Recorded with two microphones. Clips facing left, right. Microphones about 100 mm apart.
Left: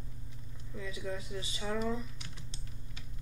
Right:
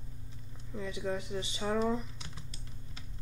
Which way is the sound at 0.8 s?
20° right (ahead or behind).